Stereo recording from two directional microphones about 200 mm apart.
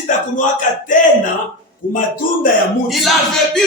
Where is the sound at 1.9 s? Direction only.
45° left (ahead or behind).